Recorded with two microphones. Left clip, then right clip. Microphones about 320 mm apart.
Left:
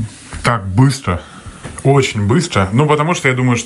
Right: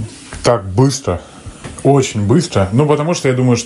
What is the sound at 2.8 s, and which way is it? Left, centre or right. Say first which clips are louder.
Speech: left 1 dB; centre.